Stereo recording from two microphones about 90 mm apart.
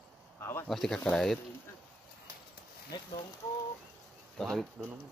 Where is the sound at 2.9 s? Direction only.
50° left (ahead or behind).